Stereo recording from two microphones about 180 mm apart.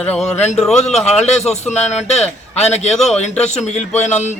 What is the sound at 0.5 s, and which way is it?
Speech, centre (ahead or behind).